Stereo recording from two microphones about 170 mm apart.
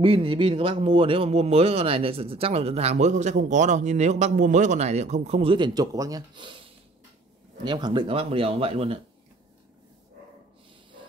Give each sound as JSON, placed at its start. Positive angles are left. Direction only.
{"t": 0.0, "sound": "a man's voice", "side_deg": -30}
{"t": 7.6, "sound": "a man's voice", "side_deg": -25}